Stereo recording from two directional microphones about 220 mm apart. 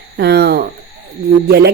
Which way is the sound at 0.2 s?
50° right (ahead or behind).